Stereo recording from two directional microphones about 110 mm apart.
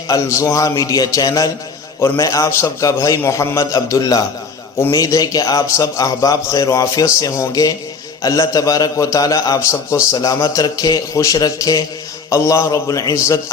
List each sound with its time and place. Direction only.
0.1 s a man's voice: 30° left (ahead or behind)